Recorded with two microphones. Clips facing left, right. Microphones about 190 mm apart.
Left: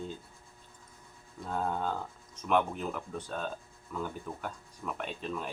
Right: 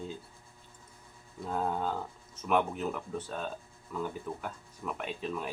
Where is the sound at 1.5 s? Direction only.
5° right (ahead or behind).